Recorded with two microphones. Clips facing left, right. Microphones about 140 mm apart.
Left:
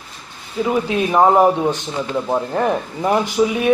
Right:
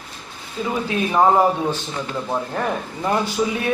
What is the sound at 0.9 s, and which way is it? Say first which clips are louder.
A man's voice: left 2 dB; 20° left (ahead or behind).